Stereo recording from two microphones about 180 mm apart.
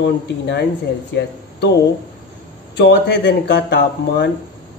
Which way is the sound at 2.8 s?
70° left (ahead or behind).